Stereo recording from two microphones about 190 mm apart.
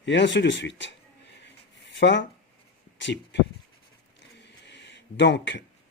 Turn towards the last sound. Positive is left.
turn(degrees=65)  # may be behind; listen again after turning